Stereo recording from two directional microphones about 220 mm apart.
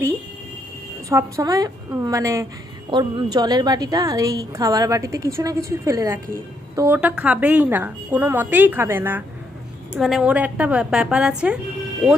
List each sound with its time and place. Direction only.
1.1 s a woman's voice: 15° right (ahead or behind)